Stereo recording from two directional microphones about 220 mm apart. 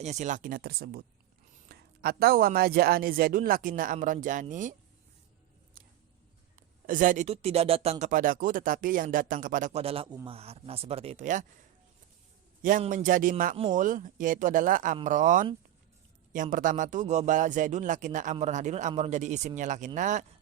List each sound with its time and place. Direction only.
0.0 s a man's voice: 30° right (ahead or behind)
6.6 s a man's voice: 40° right (ahead or behind)
12.6 s a man's voice: 35° right (ahead or behind)